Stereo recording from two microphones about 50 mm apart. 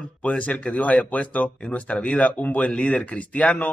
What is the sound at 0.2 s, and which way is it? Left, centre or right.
Speech, left.